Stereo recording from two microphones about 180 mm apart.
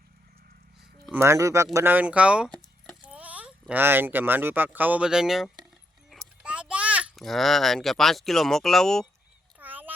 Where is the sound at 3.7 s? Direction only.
10° right (ahead or behind).